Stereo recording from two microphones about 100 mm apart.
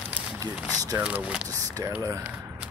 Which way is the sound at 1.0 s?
10° right (ahead or behind).